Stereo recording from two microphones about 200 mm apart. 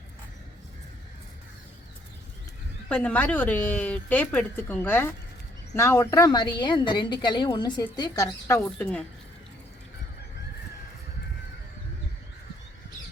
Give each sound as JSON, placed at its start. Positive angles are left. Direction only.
{"t": 2.9, "sound": "a woman's voice", "side_deg": 5}